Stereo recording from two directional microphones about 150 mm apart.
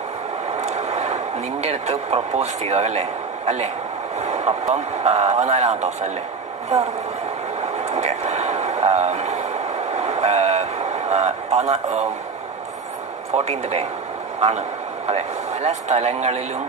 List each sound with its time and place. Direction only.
0.6 s speech: 45° right (ahead or behind)
7.7 s a sound: 45° right (ahead or behind)
13.3 s speech: 45° right (ahead or behind)
15.0 s speech: 45° right (ahead or behind)